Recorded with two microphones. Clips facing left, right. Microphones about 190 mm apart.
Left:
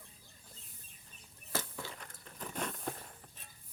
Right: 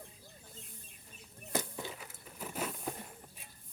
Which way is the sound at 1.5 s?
15° right (ahead or behind).